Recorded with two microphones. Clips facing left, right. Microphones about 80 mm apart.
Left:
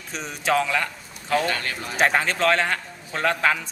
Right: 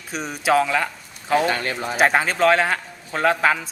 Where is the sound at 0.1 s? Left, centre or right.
Centre.